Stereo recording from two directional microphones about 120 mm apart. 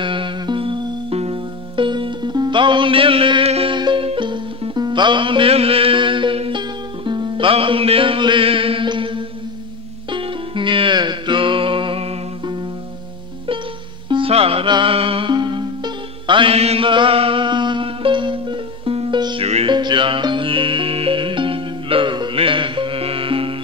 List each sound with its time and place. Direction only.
0.0 s music: 45° right (ahead or behind)
3.7 s music: 40° right (ahead or behind)
14.0 s music: 40° right (ahead or behind)
19.1 s music: 35° right (ahead or behind)
19.4 s music: 60° right (ahead or behind)
19.7 s music: 40° right (ahead or behind)